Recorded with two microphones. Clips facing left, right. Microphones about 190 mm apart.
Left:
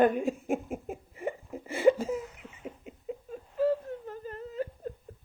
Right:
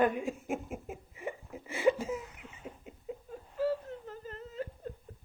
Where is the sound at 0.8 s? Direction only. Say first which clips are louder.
Left 5 dB; 50° left (ahead or behind).